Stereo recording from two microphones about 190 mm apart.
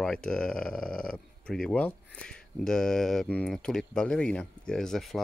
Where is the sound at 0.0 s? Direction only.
5° left (ahead or behind).